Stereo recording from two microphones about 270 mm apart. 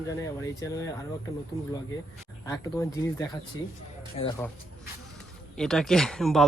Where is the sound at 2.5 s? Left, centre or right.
Centre.